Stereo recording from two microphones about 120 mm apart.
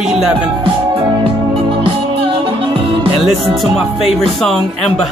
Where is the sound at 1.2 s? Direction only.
50° right (ahead or behind).